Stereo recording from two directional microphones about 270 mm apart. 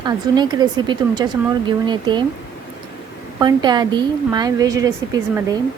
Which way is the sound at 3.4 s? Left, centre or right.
Centre.